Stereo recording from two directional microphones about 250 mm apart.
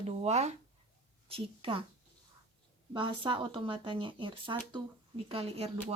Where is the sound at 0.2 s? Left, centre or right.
Right.